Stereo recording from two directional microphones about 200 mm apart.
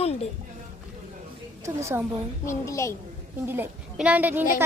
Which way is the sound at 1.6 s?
15° right (ahead or behind).